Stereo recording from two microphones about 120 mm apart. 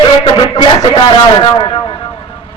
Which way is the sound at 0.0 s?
40° left (ahead or behind).